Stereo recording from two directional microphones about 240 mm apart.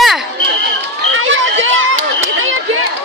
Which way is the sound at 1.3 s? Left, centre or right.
Right.